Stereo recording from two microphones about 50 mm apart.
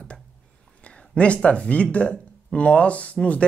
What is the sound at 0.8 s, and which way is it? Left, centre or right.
Speech, left.